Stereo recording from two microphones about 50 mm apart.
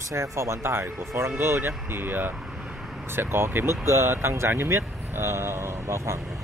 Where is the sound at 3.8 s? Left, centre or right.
Right.